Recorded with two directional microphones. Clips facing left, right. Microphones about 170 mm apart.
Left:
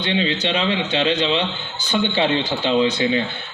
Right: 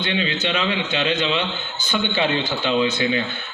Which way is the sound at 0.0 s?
30° left (ahead or behind).